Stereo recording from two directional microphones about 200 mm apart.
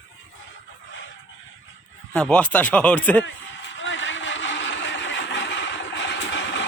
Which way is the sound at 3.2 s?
65° left (ahead or behind).